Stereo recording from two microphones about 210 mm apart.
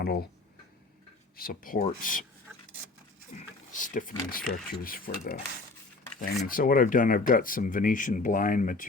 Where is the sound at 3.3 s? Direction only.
40° left (ahead or behind).